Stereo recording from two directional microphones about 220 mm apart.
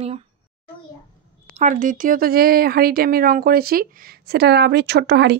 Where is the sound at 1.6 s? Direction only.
35° right (ahead or behind).